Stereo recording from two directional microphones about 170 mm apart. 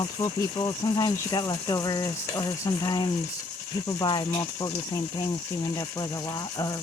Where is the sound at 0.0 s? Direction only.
20° left (ahead or behind).